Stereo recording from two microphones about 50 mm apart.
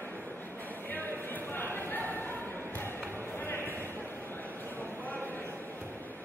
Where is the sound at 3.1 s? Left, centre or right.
Left.